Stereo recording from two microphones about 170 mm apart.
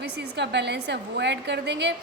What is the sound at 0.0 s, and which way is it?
A woman's voice, 90° right.